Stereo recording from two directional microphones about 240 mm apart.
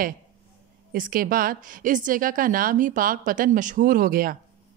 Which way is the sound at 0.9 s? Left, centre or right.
Right.